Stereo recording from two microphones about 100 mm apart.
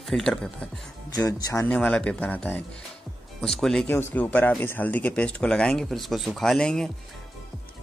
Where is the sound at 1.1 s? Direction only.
35° left (ahead or behind).